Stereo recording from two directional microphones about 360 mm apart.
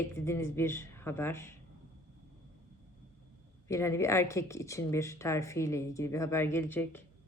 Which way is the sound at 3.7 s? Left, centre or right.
Centre.